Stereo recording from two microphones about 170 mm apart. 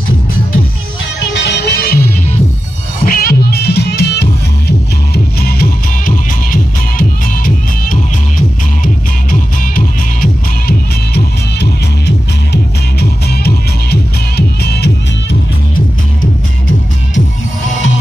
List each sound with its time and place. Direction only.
1.3 s music: 90° left; by 2.0 s 70° left (ahead or behind)
3.1 s music: 60° left (ahead or behind)
13.0 s music: 65° left (ahead or behind)